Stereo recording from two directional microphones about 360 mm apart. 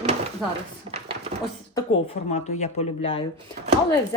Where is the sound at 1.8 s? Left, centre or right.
Centre.